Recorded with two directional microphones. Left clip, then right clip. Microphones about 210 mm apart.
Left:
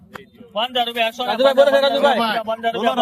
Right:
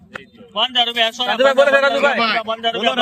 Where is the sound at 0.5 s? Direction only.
45° left (ahead or behind).